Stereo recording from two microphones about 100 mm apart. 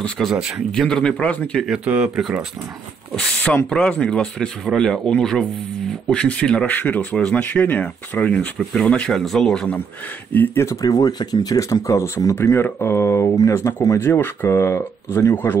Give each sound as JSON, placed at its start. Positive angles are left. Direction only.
{"t": 0.0, "sound": "speech", "side_deg": 0}
{"t": 1.9, "sound": "speech", "side_deg": -10}
{"t": 3.2, "sound": "speech", "side_deg": 10}
{"t": 10.3, "sound": "speech", "side_deg": 20}